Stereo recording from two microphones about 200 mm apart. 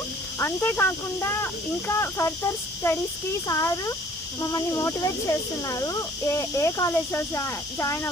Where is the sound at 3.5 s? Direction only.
15° left (ahead or behind).